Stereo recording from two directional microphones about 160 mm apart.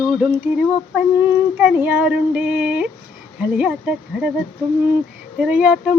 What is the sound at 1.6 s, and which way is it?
Speech, 10° right (ahead or behind).